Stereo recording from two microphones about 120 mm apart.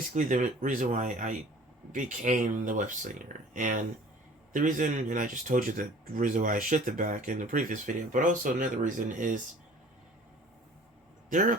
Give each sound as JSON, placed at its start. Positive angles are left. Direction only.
{"t": 0.1, "sound": "speech", "side_deg": -90}
{"t": 11.3, "sound": "speech", "side_deg": -90}